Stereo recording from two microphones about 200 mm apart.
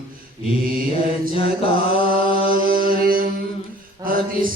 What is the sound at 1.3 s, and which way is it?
Mantra, 30° left (ahead or behind).